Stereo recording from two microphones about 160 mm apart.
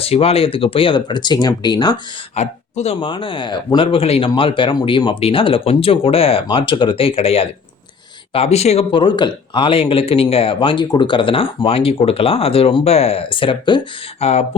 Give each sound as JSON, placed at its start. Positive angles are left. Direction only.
{"t": 0.0, "sound": "speech", "side_deg": 40}
{"t": 2.3, "sound": "speech", "side_deg": 45}
{"t": 3.0, "sound": "speech", "side_deg": 30}